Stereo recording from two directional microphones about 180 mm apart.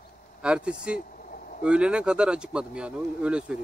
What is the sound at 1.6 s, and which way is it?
Speech, 5° right (ahead or behind).